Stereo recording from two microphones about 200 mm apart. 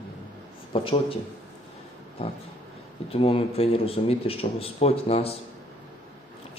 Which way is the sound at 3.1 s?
30° left (ahead or behind).